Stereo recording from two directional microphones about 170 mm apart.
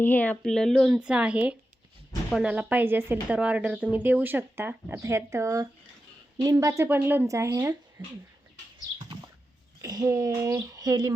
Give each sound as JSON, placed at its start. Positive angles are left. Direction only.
{"t": 0.0, "sound": "speech", "side_deg": 10}
{"t": 9.8, "sound": "speech", "side_deg": -20}